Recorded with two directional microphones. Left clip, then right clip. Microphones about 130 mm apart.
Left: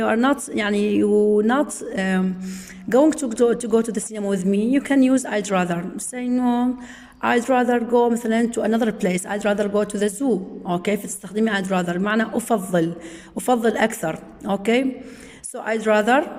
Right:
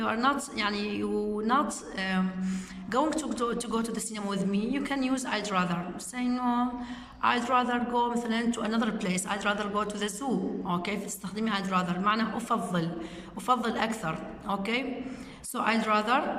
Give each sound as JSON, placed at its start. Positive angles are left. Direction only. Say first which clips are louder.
{"t": 0.0, "sound": "speech", "louder": "left 8 dB", "side_deg": 45}